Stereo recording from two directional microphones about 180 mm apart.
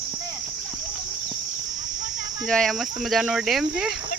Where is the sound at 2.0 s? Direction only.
90° left.